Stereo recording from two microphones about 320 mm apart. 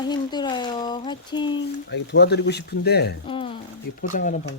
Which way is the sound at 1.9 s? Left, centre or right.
Left.